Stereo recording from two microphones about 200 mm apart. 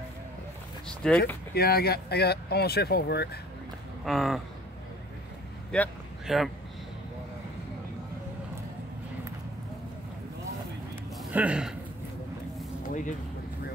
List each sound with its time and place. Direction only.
1.0 s speech: 5° left (ahead or behind)
1.5 s speech: 50° left (ahead or behind)
4.0 s speech: centre (ahead or behind)
5.7 s speech: centre (ahead or behind)
11.3 s speech: 5° right (ahead or behind)